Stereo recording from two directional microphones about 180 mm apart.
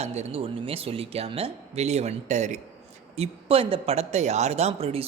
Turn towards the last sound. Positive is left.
turn(degrees=-35)  # may be behind; listen again after turning